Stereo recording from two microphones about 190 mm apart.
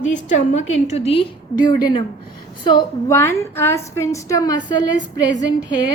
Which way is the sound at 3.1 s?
15° left (ahead or behind).